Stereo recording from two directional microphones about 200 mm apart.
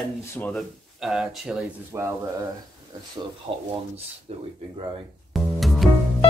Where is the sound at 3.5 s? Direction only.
35° right (ahead or behind).